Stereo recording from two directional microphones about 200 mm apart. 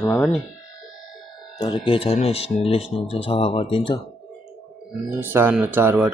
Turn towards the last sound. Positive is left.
turn(degrees=-10)  # may be behind; listen again after turning